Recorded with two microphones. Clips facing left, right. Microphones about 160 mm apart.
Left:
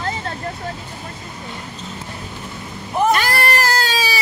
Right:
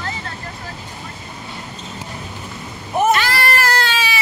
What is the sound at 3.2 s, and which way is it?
Baby cry, 40° left (ahead or behind).